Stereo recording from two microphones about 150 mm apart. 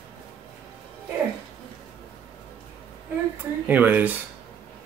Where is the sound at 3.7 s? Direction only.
10° right (ahead or behind).